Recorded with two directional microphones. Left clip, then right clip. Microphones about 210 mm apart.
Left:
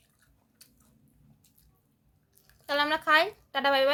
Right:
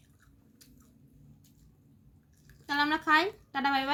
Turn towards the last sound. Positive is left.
turn(degrees=30)  # may be behind; listen again after turning